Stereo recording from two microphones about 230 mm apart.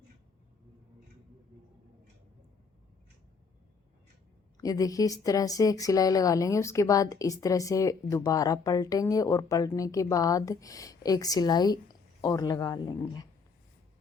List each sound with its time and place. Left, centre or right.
4.5 s a woman's voice: centre